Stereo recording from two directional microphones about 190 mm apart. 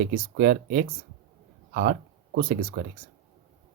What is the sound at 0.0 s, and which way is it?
Speech, 50° right (ahead or behind).